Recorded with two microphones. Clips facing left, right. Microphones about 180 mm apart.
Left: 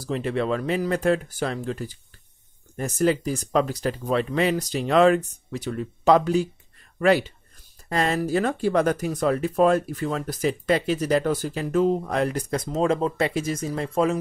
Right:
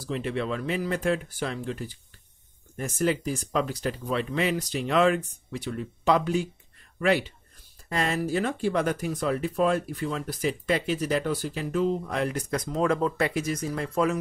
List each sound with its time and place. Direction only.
0.0 s speech: 40° left (ahead or behind)